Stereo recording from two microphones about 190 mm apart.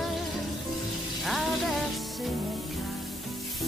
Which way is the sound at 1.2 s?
Centre (ahead or behind).